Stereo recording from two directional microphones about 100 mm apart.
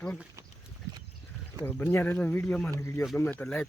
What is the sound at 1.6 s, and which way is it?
Speech, 20° left (ahead or behind).